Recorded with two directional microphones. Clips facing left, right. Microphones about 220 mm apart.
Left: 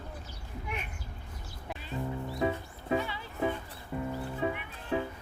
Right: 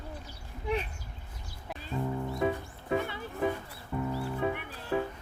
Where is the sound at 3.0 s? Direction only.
50° right (ahead or behind).